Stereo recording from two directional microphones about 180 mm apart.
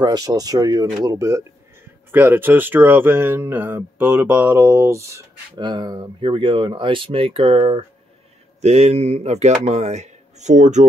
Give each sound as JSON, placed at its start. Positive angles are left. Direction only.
{"t": 0.0, "sound": "speech", "side_deg": -20}